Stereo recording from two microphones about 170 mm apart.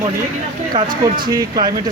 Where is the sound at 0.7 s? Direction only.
25° right (ahead or behind).